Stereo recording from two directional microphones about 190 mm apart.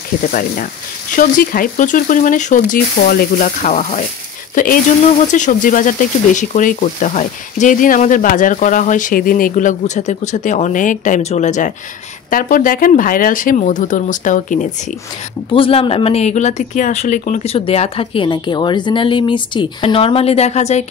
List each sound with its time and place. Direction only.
0.2 s speech: 45° left (ahead or behind)
5.3 s speech: 40° left (ahead or behind)
15.5 s speech: 30° left (ahead or behind)